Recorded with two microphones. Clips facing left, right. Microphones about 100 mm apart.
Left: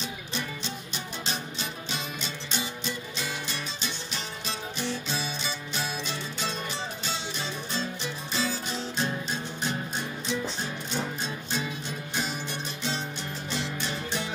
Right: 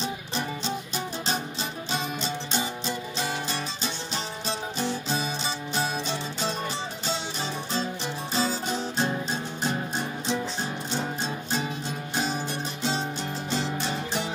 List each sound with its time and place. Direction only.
0.0 s music: 35° right (ahead or behind)
13.5 s music: 30° right (ahead or behind)